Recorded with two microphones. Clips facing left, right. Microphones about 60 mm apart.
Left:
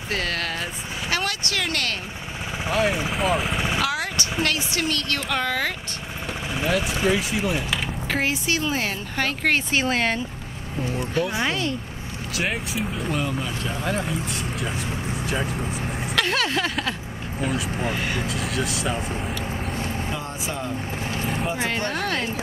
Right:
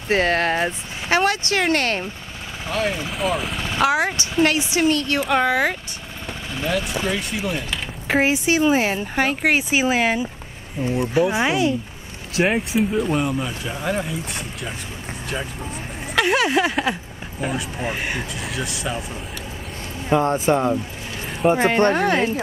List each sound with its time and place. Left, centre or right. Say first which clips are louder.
0.1 s speech: right 8 dB; right
2.7 s speech: left 1 dB; centre
3.5 s vehicle: left 2 dB; centre
3.8 s speech: right 6 dB; right
6.5 s speech: right 1 dB; centre
8.1 s speech: right 7 dB; right
11.0 s speech: right 6 dB; centre
12.7 s speech: right 7 dB; centre
16.2 s speech: right 6 dB; centre
17.9 s speech: even; right
18.3 s speech: left 2 dB; centre
20.1 s speech: right 12 dB; right
21.9 s speech: right 7 dB; right